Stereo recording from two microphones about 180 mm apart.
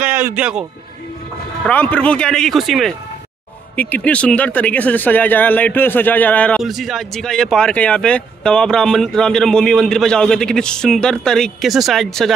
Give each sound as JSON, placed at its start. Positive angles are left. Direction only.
{"t": 0.0, "sound": "a man's voice", "side_deg": -10}
{"t": 1.7, "sound": "speech", "side_deg": 10}